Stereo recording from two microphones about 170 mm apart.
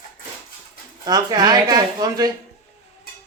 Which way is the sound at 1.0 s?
20° right (ahead or behind).